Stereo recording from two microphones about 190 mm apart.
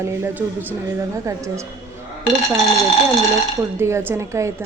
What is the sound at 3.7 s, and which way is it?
Speech, 15° right (ahead or behind).